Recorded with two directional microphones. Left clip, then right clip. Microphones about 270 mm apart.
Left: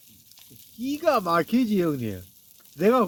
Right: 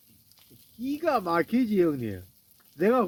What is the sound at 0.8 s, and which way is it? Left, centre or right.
Speech, left.